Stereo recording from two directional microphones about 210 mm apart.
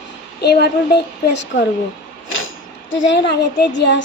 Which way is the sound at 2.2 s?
70° left (ahead or behind).